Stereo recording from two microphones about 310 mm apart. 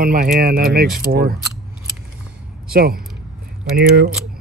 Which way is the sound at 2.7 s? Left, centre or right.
Right.